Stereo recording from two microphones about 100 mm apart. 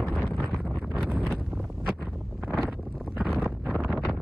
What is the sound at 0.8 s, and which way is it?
Wind noise, centre (ahead or behind).